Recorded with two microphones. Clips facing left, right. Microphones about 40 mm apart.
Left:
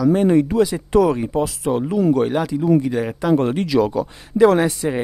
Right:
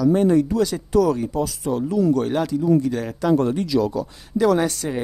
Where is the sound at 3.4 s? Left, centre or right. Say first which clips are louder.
Left 3 dB; left.